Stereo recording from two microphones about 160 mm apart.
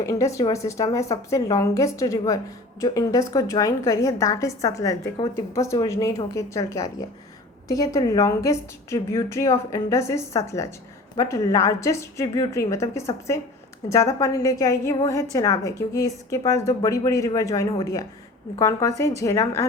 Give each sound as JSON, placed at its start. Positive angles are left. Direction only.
{"t": 0.0, "sound": "a woman's voice", "side_deg": 20}